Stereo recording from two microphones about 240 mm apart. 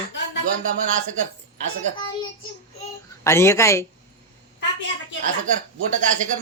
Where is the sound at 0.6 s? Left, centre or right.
Right.